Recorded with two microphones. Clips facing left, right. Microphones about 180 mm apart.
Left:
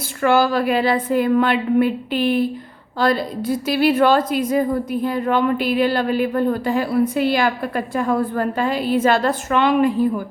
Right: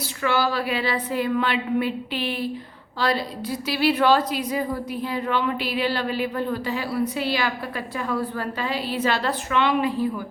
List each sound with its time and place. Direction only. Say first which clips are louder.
0.2 s a woman's voice: left 7 dB; 50° left (ahead or behind)